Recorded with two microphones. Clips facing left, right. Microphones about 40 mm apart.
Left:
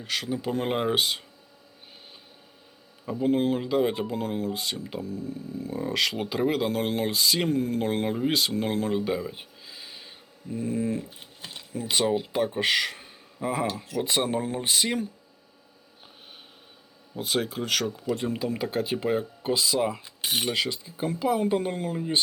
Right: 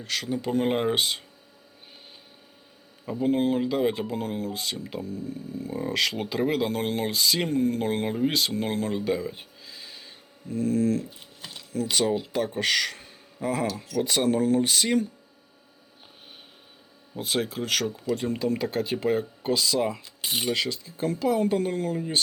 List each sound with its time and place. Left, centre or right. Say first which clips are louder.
0.0 s speech: even; centre
3.1 s speech: even; centre
13.8 s speech: right 2 dB; left
17.2 s speech: even; centre
20.2 s speech: even; left; by 22.2 s centre